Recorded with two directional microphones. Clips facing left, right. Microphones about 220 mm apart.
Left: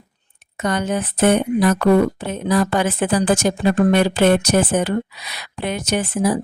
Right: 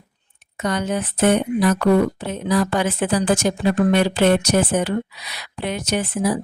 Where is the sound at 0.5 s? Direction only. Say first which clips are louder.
Left 1 dB; 50° left (ahead or behind).